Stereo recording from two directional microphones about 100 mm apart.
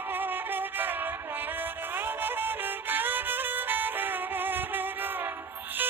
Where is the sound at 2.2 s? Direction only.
20° right (ahead or behind).